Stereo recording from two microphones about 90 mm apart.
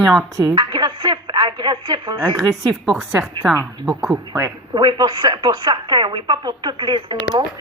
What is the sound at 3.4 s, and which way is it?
Speech, 50° right (ahead or behind).